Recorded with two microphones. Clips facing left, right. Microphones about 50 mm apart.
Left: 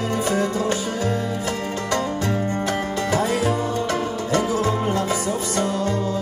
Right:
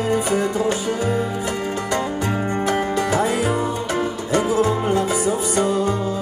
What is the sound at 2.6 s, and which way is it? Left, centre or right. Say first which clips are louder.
Music: right 3 dB; right.